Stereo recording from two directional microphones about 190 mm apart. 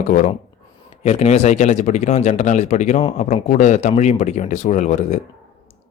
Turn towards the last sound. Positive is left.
turn(degrees=40)  # may be behind; listen again after turning